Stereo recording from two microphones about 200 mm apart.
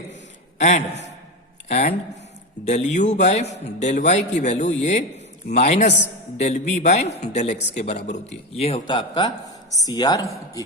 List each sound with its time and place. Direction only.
1.6 s a man's voice: 35° left (ahead or behind); by 10.6 s 15° left (ahead or behind)